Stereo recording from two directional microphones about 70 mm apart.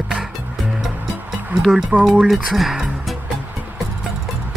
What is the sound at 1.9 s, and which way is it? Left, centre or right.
Speech, centre.